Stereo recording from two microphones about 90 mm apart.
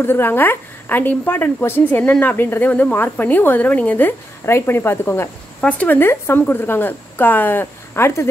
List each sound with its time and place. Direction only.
0.0 s a woman's voice: 25° left (ahead or behind)
5.6 s a woman's voice: 15° left (ahead or behind)